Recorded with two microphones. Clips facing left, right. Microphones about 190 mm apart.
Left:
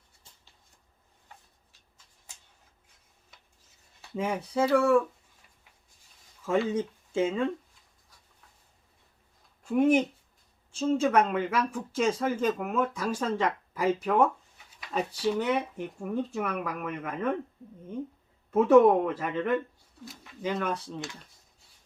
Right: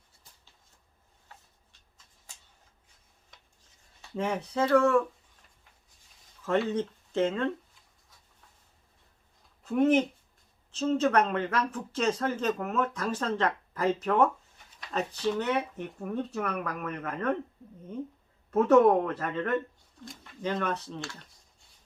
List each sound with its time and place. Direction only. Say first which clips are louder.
4.0 s speech: even; 10° left (ahead or behind)
6.4 s speech: left 1 dB; 10° left (ahead or behind)
9.6 s speech: left 1 dB; 10° left (ahead or behind)
18.5 s speech: left 2 dB; 5° left (ahead or behind)